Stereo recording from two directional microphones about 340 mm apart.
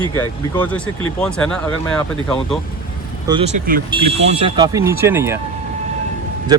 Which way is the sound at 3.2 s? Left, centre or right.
Centre.